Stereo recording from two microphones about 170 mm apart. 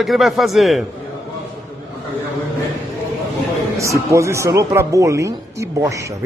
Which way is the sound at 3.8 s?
15° right (ahead or behind).